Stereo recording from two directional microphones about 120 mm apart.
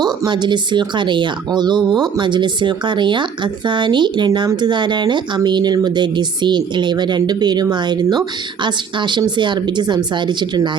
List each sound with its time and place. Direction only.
0.0 s speech: 35° right (ahead or behind)